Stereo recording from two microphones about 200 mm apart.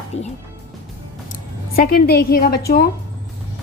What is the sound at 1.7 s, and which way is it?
A woman's voice, 50° left (ahead or behind).